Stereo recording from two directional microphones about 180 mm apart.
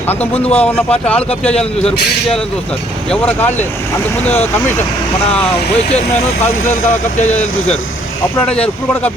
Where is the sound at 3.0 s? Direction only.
5° left (ahead or behind).